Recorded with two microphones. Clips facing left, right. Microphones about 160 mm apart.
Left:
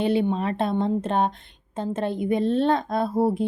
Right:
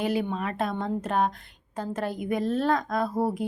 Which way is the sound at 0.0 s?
30° left (ahead or behind).